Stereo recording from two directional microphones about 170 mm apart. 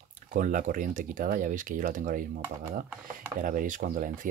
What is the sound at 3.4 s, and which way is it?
Speech, 50° right (ahead or behind).